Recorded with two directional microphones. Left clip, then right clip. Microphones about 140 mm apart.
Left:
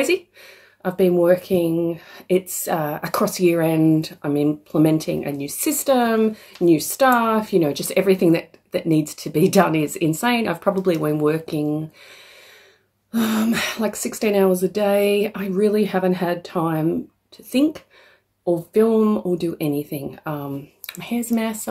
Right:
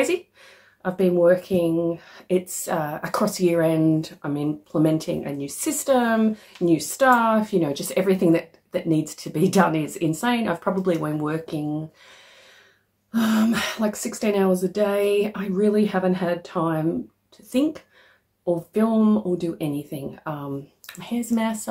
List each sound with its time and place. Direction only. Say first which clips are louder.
0.8 s speech: left 2 dB; 35° left (ahead or behind)
13.1 s speech: left 1 dB; 30° left (ahead or behind)